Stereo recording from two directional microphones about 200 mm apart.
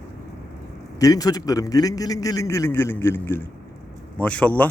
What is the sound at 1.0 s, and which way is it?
Speech, 20° left (ahead or behind).